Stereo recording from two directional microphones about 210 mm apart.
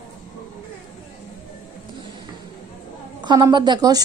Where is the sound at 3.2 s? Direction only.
20° right (ahead or behind).